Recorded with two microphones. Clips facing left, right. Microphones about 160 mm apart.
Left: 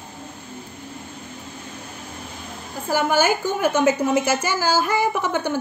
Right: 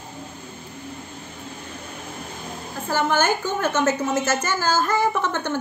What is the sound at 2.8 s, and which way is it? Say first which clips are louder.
A woman's voice: left 2 dB; 10° left (ahead or behind).